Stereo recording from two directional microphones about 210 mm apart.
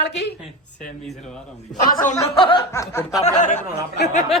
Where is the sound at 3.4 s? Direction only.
35° left (ahead or behind).